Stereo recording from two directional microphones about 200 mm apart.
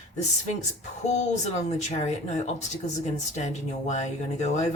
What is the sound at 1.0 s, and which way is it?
Speech, 35° left (ahead or behind).